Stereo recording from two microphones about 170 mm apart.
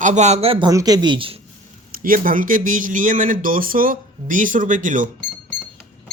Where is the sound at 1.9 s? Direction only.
55° right (ahead or behind).